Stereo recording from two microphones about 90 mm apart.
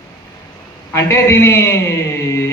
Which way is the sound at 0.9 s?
30° left (ahead or behind).